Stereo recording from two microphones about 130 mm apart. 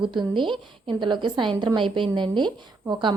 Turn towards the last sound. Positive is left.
turn(degrees=-35)  # may be behind; listen again after turning